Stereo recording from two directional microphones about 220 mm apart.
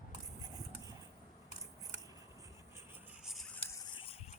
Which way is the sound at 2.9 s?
5° right (ahead or behind).